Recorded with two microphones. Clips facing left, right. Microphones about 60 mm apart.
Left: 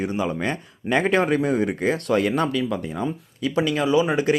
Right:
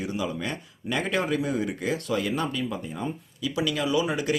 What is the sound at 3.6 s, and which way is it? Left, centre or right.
Speech, left.